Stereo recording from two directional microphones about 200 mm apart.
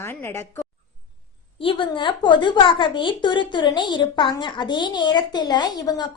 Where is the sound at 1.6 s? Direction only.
25° left (ahead or behind).